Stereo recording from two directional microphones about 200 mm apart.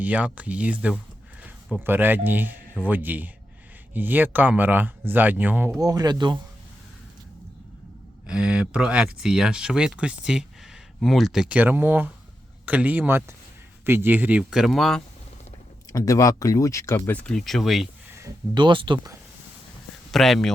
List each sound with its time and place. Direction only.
0.0 s speech: 5° right (ahead or behind)
5.8 s speech: 20° right (ahead or behind)
8.3 s speech: 5° right (ahead or behind)
15.9 s speech: 15° left (ahead or behind); by 17.8 s centre (ahead or behind)
18.1 s speech: 20° right (ahead or behind)
20.1 s speech: centre (ahead or behind)